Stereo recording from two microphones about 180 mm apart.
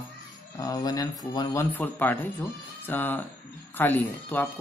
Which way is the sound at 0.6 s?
20° left (ahead or behind).